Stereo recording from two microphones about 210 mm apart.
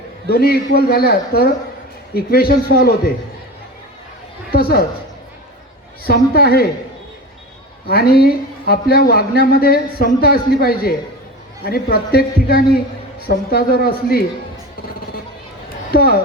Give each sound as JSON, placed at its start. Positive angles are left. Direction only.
{"t": 0.3, "sound": "a man's voice", "side_deg": 45}
{"t": 4.5, "sound": "a man's voice", "side_deg": 45}
{"t": 6.0, "sound": "a man's voice", "side_deg": 45}
{"t": 7.9, "sound": "a man's voice", "side_deg": 45}
{"t": 15.9, "sound": "a man's voice", "side_deg": 45}